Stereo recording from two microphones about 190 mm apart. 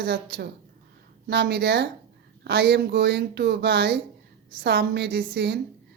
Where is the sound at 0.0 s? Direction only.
60° right (ahead or behind).